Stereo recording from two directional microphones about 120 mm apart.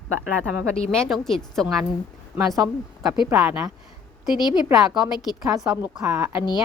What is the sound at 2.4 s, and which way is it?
Speech, 30° right (ahead or behind).